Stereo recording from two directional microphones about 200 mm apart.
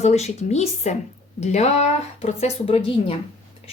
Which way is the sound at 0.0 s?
35° left (ahead or behind).